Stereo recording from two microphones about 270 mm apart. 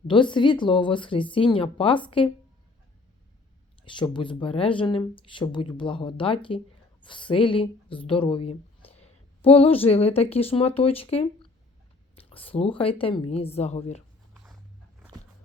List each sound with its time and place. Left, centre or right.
0.1 s speech: centre
3.8 s speech: centre